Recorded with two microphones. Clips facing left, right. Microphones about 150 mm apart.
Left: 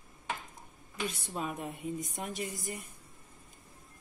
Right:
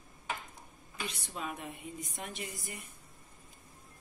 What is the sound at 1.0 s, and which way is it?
A woman's voice, 45° left (ahead or behind).